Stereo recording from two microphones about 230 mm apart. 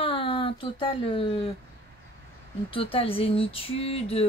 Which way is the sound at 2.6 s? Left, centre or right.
Left.